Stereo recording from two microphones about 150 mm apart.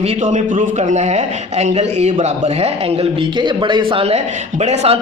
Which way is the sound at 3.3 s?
30° right (ahead or behind).